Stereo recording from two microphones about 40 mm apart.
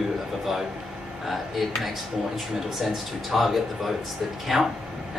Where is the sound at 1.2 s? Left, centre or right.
Centre.